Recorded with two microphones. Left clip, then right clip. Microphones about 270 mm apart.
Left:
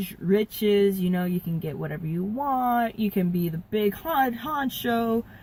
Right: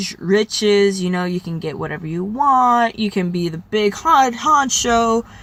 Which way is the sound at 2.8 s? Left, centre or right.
Centre.